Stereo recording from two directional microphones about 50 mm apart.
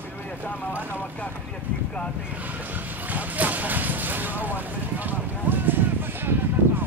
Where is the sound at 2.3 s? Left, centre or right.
Right.